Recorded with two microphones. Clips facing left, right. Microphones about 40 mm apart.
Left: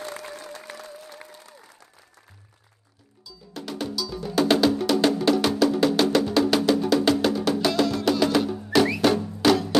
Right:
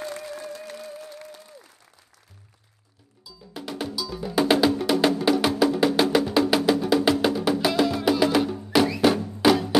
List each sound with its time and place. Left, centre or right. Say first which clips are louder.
3.3 s cowbell: even; centre
9.0 s music: right 1 dB; centre